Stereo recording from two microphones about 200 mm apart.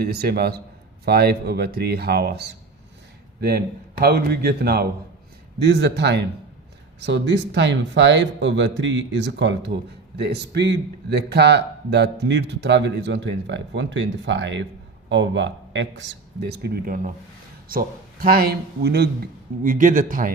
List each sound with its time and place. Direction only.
0.0 s speech: 50° right (ahead or behind)
4.0 s speech: 50° right (ahead or behind)
19.6 s speech: 40° right (ahead or behind)